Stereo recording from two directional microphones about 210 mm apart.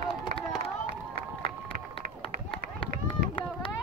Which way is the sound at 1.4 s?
25° left (ahead or behind).